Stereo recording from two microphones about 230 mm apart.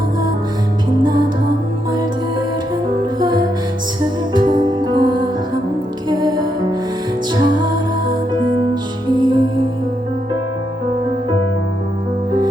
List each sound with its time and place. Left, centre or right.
3.2 s music: centre